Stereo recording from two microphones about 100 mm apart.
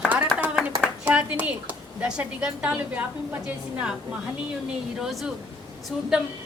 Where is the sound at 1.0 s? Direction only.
15° right (ahead or behind).